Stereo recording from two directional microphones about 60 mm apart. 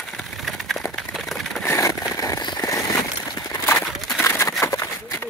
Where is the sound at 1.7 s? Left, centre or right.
Left.